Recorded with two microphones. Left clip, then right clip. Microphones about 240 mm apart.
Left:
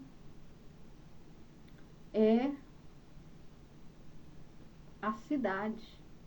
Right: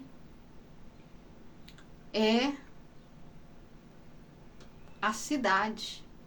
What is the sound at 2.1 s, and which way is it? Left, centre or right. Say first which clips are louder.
Speech: right 1 dB; centre.